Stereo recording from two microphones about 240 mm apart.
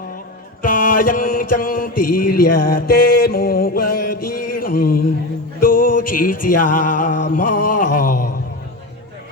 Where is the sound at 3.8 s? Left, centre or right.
Left.